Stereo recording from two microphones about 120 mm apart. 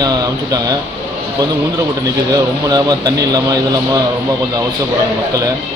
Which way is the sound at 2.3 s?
35° right (ahead or behind).